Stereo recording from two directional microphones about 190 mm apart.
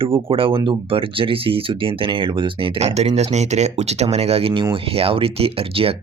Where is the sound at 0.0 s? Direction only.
30° right (ahead or behind).